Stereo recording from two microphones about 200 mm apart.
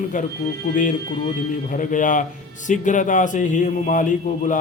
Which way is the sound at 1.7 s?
40° left (ahead or behind).